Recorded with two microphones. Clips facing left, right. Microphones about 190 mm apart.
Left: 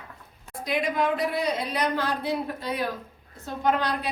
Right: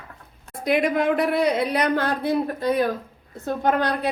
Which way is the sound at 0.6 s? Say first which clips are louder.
Right 5 dB; 60° right (ahead or behind).